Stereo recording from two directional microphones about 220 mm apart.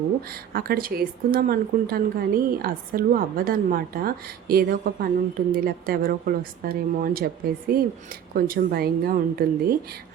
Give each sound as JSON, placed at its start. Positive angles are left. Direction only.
{"t": 0.5, "sound": "a woman's voice", "side_deg": -40}